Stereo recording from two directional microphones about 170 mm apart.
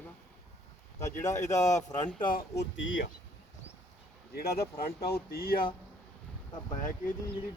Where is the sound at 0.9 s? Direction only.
15° left (ahead or behind).